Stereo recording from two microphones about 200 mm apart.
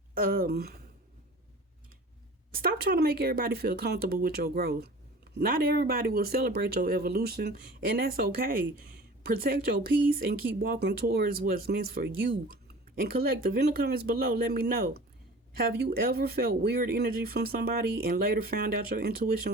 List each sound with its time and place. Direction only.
0.1 s speech: 45° right (ahead or behind)
2.6 s speech: 50° right (ahead or behind)